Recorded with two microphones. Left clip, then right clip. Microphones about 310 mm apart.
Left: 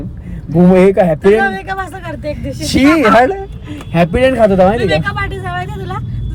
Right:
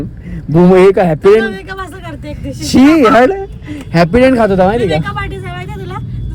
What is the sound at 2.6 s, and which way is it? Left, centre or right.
Speech, right.